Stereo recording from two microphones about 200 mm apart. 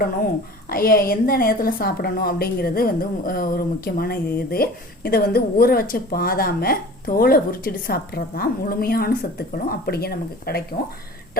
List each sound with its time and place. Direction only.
0.7 s a woman's voice: 50° left (ahead or behind)